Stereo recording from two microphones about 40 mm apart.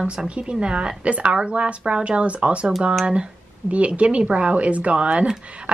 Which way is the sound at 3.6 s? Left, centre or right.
Right.